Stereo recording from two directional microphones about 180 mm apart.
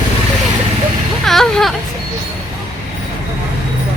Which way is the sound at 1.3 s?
Centre (ahead or behind).